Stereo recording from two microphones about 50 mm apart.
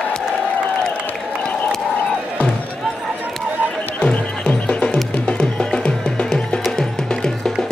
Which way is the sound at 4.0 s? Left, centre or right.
Left.